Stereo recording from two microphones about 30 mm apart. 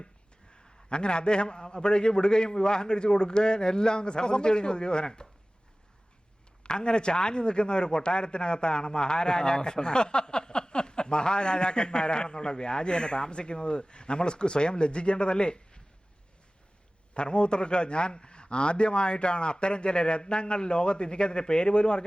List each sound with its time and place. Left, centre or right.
0.9 s a man's voice: left
6.6 s a man's voice: left
17.2 s a man's voice: left